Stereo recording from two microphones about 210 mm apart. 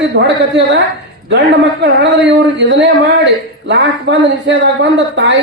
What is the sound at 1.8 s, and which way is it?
A man's voice, 55° right (ahead or behind).